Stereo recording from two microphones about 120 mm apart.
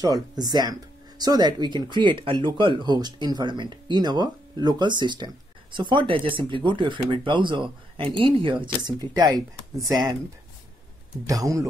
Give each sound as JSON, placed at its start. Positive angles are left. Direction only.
{"t": 0.0, "sound": "speech", "side_deg": -30}
{"t": 11.2, "sound": "speech", "side_deg": -25}